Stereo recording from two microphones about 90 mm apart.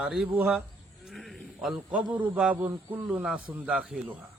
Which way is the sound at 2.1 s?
20° right (ahead or behind).